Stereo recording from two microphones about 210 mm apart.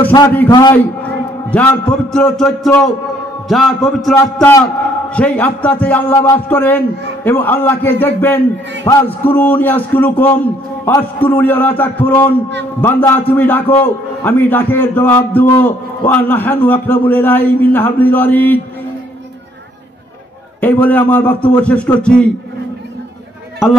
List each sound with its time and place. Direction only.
0.0 s a man's voice: 15° left (ahead or behind)
1.5 s a man's voice: 5° left (ahead or behind)
20.6 s a man's voice: 10° left (ahead or behind)
23.6 s a man's voice: 5° right (ahead or behind)